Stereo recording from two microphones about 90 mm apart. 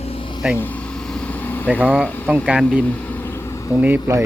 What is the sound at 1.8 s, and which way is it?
Speech, 10° right (ahead or behind).